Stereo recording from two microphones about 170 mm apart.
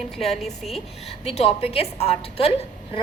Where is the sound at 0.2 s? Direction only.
Centre (ahead or behind).